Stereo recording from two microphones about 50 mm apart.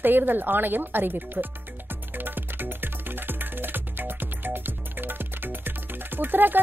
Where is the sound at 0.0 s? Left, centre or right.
Right.